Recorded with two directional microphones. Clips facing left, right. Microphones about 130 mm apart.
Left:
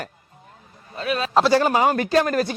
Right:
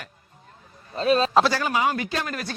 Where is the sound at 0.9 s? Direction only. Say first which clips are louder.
Right 4 dB; 30° right (ahead or behind).